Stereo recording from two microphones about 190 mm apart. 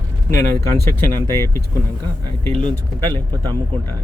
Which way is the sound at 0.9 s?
10° left (ahead or behind).